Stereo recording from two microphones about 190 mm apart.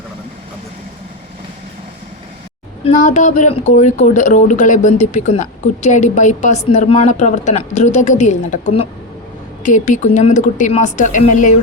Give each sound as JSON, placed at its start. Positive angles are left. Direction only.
{"t": 2.8, "sound": "a woman's voice", "side_deg": 40}